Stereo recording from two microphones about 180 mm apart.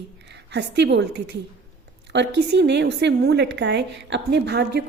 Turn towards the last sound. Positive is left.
turn(degrees=-70)  # may be behind; listen again after turning